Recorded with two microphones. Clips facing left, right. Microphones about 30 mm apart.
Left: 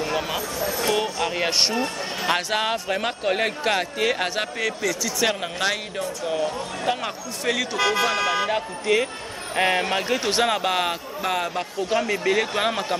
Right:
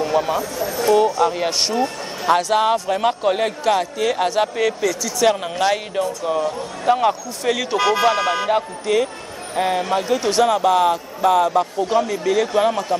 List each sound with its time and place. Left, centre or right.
0.0 s a sound: centre
0.7 s speech: left
1.2 s a man's voice: centre
4.6 s speech: centre
9.6 s speech: left
11.1 s a man's voice: centre
11.9 s a man's voice: left